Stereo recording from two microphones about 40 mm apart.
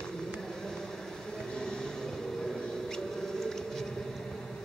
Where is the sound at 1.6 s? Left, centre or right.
Centre.